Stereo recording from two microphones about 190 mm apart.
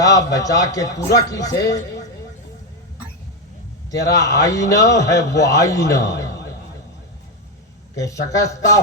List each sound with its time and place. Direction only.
0.0 s a man's voice: 20° left (ahead or behind)
4.0 s a man's voice: 15° left (ahead or behind)
7.9 s a man's voice: 15° left (ahead or behind)